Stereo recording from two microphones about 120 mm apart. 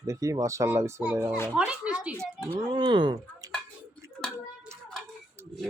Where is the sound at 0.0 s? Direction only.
25° right (ahead or behind).